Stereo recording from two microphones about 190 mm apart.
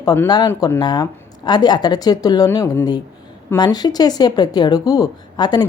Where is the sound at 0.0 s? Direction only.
20° left (ahead or behind).